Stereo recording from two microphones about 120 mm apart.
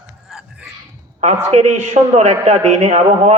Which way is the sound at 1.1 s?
80° right.